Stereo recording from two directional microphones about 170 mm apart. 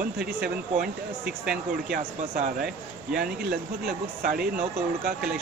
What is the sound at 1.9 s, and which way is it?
Speech, 55° right (ahead or behind).